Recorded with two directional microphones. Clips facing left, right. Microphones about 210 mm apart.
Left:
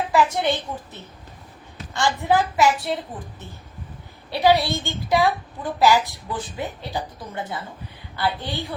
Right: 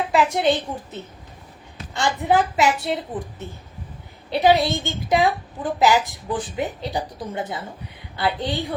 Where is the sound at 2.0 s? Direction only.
20° right (ahead or behind).